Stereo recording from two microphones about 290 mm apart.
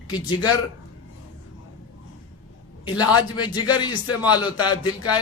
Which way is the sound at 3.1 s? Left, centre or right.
Left.